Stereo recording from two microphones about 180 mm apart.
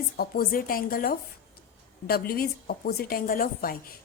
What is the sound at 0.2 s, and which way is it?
A woman's voice, 55° left (ahead or behind).